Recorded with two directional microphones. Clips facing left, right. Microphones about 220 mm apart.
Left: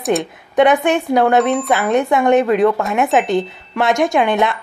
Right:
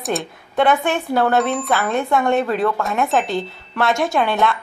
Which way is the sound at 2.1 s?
15° left (ahead or behind).